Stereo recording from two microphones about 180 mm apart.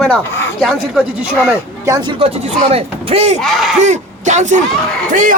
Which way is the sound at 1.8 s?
20° right (ahead or behind).